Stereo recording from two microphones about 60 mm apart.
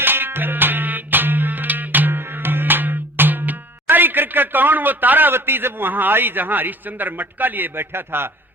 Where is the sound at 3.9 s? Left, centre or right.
Right.